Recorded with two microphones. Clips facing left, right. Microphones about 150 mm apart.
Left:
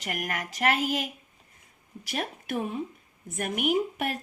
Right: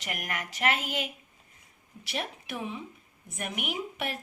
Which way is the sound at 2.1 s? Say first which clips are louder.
Left 3 dB; 45° left (ahead or behind).